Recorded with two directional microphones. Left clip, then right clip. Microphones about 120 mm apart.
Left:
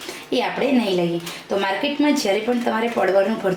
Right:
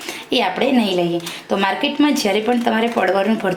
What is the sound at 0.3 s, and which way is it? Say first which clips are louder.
A woman's voice: right 3 dB; 40° right (ahead or behind).